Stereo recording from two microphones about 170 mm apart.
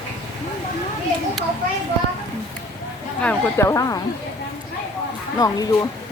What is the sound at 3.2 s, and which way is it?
Speech, 10° left (ahead or behind).